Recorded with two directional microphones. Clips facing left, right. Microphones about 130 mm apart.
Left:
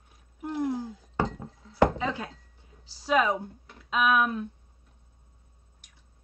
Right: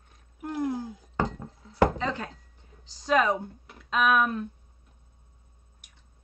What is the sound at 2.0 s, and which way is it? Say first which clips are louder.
A woman's voice: even; 5° left (ahead or behind).